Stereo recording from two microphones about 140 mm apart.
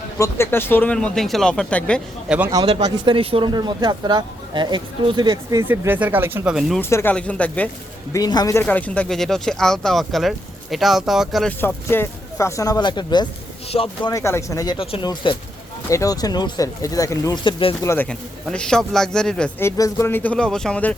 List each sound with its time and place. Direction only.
0.2 s speech: 15° left (ahead or behind)
2.3 s speech: 5° right (ahead or behind)
2.8 s speech: 35° right (ahead or behind)
5.6 s speech: 15° right (ahead or behind)
6.9 s speech: 10° left (ahead or behind)
8.1 s speech: 25° left (ahead or behind)
8.6 s speech: 10° left (ahead or behind)
11.6 s speech: 15° left (ahead or behind); by 13.2 s 30° left (ahead or behind)
13.7 s speech: 40° left (ahead or behind)
14.1 s speech: 20° left (ahead or behind)
14.8 s speech: 35° left (ahead or behind)
17.8 s speech: 15° left (ahead or behind)
19.5 s speech: 20° left (ahead or behind)